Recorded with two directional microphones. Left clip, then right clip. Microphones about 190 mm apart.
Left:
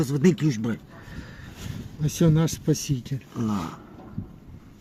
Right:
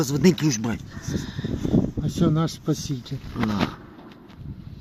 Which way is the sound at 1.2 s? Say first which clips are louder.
Right 10 dB; 30° right (ahead or behind).